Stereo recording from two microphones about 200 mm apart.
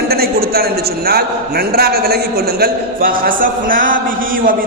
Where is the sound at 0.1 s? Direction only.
50° right (ahead or behind).